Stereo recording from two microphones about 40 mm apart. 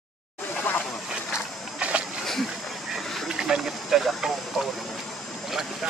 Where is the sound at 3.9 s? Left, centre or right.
Centre.